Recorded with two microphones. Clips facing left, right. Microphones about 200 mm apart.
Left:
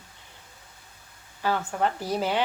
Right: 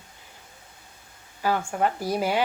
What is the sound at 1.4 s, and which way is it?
Speech, 10° right (ahead or behind).